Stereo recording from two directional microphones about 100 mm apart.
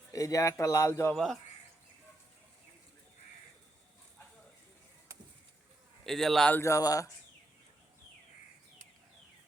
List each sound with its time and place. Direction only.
0.1 s speech: 35° left (ahead or behind)
1.1 s a man's voice: centre (ahead or behind)
6.1 s a man's voice: 5° left (ahead or behind)
6.5 s speech: 30° left (ahead or behind)